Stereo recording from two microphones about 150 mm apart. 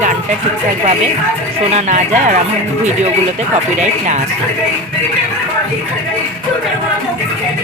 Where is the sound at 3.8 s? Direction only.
50° right (ahead or behind).